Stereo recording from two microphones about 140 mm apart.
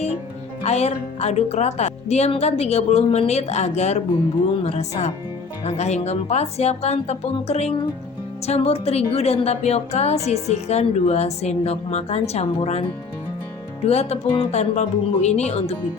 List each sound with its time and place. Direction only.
0.6 s a woman's voice: 50° left (ahead or behind)